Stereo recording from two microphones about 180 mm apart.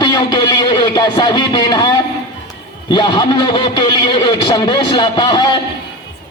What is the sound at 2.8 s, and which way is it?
A man's voice, 25° left (ahead or behind).